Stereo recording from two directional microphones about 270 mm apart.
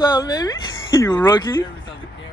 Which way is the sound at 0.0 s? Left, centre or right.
Centre.